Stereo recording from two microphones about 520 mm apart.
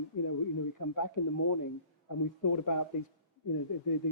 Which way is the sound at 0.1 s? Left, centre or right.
Left.